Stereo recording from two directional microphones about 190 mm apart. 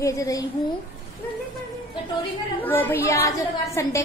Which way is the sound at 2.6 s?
10° left (ahead or behind).